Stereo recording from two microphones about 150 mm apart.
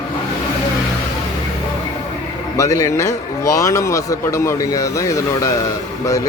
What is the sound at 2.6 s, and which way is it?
A man's voice, 20° left (ahead or behind).